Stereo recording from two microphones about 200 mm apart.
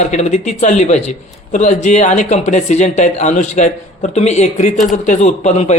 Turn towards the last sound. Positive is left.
turn(degrees=35)  # may be behind; listen again after turning